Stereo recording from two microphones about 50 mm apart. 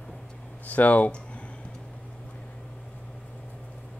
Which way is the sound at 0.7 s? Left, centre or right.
Left.